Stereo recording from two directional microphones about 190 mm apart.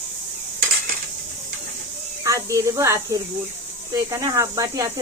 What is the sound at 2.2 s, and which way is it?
Speech, 15° right (ahead or behind).